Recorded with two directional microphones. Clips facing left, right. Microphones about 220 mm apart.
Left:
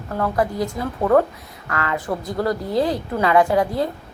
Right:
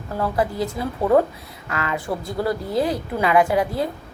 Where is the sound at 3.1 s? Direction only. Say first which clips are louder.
Left 1 dB; 15° right (ahead or behind).